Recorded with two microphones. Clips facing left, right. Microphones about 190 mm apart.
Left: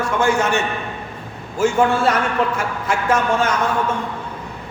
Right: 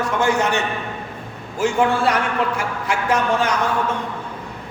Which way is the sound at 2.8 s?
15° right (ahead or behind).